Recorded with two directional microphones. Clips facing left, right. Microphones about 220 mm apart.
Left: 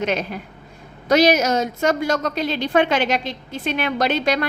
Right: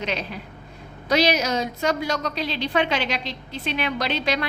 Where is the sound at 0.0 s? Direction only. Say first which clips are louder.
Left 6 dB; 50° left (ahead or behind).